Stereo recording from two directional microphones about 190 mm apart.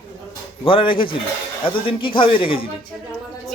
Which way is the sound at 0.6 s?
25° left (ahead or behind).